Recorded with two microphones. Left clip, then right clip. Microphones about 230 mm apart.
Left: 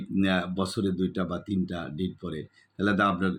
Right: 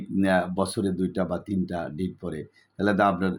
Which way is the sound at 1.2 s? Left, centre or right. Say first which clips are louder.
Right 4 dB; left.